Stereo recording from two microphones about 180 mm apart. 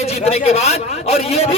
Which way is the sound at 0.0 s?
35° left (ahead or behind).